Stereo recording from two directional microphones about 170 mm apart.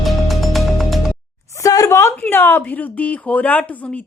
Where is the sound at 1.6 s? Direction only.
20° left (ahead or behind).